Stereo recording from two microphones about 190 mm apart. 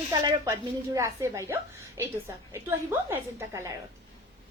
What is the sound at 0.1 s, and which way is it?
A woman's voice, 20° right (ahead or behind).